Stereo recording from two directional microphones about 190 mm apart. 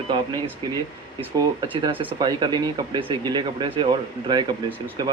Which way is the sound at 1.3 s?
20° right (ahead or behind).